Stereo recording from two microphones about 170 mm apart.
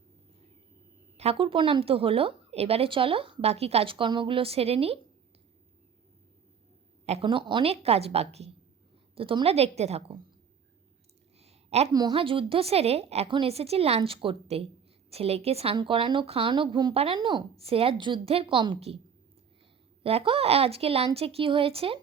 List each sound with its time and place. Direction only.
1.1 s speech: 35° right (ahead or behind)
7.0 s a sound: 40° right (ahead or behind)
7.3 s speech: 30° right (ahead or behind)
11.3 s a sound: 40° right (ahead or behind)
11.9 s speech: 25° right (ahead or behind)
20.0 s speech: 35° right (ahead or behind)